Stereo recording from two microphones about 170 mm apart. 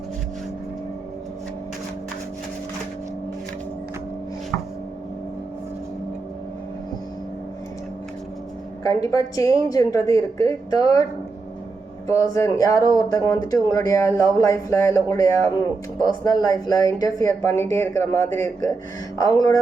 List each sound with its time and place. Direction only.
8.8 s speech: 20° left (ahead or behind)
12.0 s speech: 20° left (ahead or behind)